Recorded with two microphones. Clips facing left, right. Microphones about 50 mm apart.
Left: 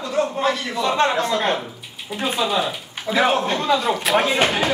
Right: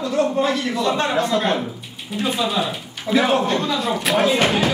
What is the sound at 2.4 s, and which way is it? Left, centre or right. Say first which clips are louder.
A man's voice: even; centre.